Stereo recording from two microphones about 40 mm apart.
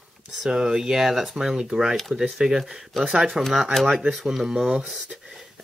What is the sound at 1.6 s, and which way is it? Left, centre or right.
Speech, centre.